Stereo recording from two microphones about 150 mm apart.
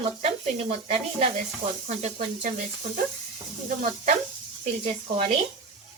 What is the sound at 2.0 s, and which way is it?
Speech, 60° right (ahead or behind).